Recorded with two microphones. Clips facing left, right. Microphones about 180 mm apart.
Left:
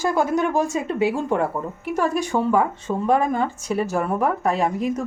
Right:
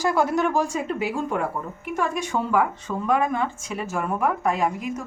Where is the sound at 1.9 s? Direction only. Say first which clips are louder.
Left 4 dB; 35° left (ahead or behind).